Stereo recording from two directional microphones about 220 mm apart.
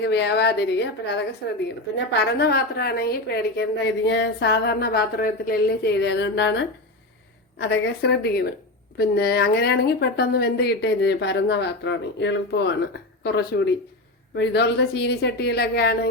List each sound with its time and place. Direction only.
0.0 s a woman's voice: 50° left (ahead or behind)
7.6 s a woman's voice: 50° left (ahead or behind)